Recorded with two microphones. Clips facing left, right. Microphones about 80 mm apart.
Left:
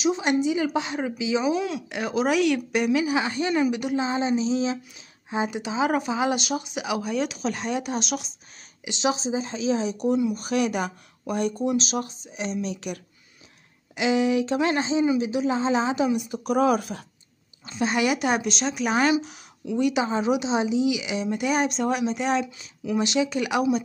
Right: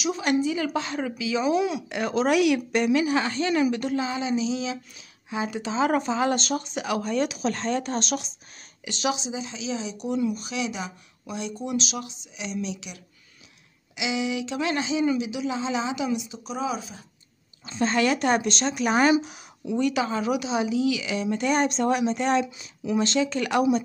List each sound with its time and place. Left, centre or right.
0.0 s a woman's voice: left
1.9 s speech: centre
2.7 s a woman's voice: centre; by 4.7 s left
5.3 s a woman's voice: left
7.2 s speech: centre
7.5 s a woman's voice: centre
8.8 s a woman's voice: centre
9.1 s speech: left
11.6 s speech: left
16.2 s speech: left
17.6 s speech: centre
19.2 s a sound: centre
19.8 s a woman's voice: left; by 22.9 s centre
22.9 s a woman's voice: centre